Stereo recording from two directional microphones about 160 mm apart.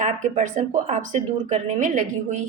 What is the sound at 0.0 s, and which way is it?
A woman's voice, 50° right (ahead or behind).